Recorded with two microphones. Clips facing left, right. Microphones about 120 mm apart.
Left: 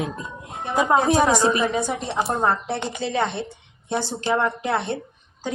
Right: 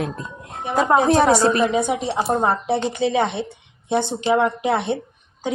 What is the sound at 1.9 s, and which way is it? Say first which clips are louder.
A woman's voice: right 4 dB; 10° right (ahead or behind).